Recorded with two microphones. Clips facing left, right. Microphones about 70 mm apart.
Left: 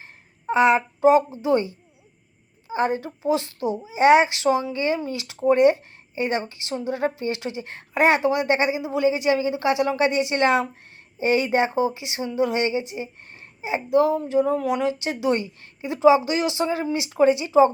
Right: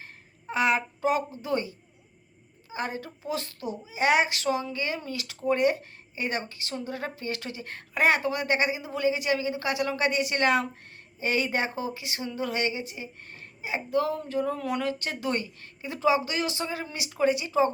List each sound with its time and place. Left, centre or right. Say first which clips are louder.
0.0 s speech: left 8 dB; left